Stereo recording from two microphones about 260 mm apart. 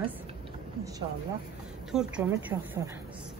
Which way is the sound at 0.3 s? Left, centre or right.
Centre.